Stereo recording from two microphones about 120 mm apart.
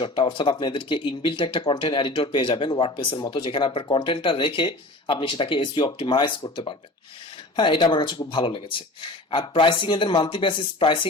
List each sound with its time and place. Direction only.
0.0 s speech: 40° left (ahead or behind)